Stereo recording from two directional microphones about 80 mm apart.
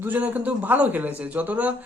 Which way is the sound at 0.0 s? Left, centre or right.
Right.